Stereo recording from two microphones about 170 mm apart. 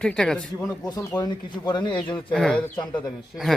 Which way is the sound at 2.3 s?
5° left (ahead or behind).